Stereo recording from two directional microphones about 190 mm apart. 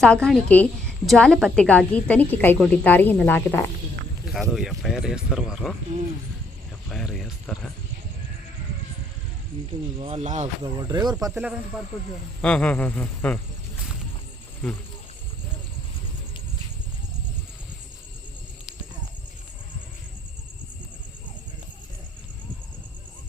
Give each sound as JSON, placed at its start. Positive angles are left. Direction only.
{"t": 0.0, "sound": "a woman's voice", "side_deg": 5}
{"t": 6.8, "sound": "speech", "side_deg": 0}
{"t": 10.0, "sound": "speech", "side_deg": -35}
{"t": 10.8, "sound": "speech", "side_deg": -20}
{"t": 11.3, "sound": "speech", "side_deg": -10}
{"t": 12.4, "sound": "a woman's voice", "side_deg": 5}